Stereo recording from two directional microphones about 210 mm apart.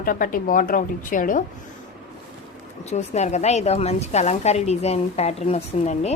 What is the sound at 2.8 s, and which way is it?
A woman's voice, 30° left (ahead or behind).